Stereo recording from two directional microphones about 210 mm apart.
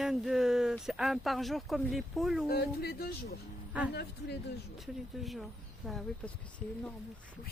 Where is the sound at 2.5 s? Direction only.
45° left (ahead or behind).